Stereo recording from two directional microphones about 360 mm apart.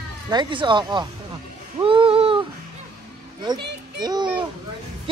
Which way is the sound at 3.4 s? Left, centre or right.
Centre.